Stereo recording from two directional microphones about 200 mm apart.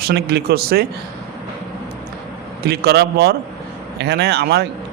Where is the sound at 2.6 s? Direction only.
55° right (ahead or behind).